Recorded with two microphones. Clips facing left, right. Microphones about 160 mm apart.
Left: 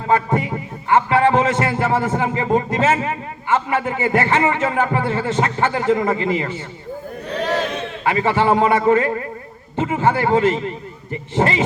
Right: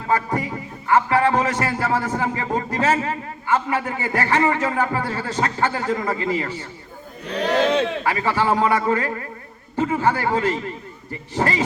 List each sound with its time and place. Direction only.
0.1 s a man's voice: 25° left (ahead or behind)
8.0 s a man's voice: 25° left (ahead or behind)